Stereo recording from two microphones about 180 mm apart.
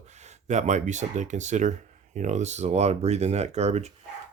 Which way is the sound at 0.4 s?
40° right (ahead or behind).